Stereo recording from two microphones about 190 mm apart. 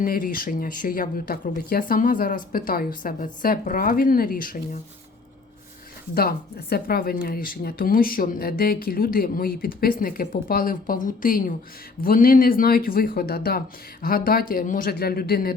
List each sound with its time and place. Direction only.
0.0 s speech: 50° left (ahead or behind)
6.1 s speech: 55° left (ahead or behind)